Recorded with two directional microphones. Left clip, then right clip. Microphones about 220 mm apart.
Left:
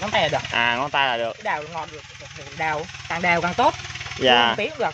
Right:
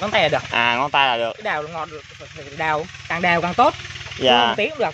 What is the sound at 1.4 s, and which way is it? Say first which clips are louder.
Speech: right 2 dB; 50° right (ahead or behind).